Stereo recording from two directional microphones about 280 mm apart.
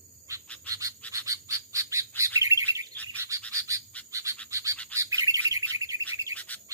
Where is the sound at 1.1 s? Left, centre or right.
Centre.